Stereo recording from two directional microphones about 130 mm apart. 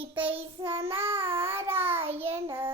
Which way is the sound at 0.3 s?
45° right (ahead or behind).